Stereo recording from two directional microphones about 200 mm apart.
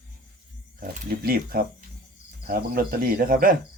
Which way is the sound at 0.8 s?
45° right (ahead or behind).